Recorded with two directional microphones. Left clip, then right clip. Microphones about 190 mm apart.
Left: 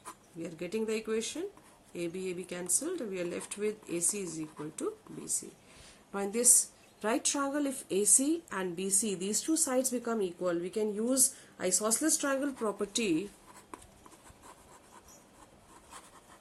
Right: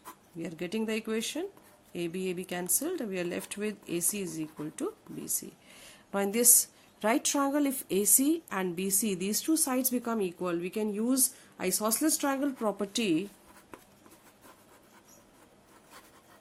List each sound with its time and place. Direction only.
0.3 s speech: 40° right (ahead or behind)
5.4 s a sound: 45° right (ahead or behind)
7.0 s speech: 40° right (ahead or behind)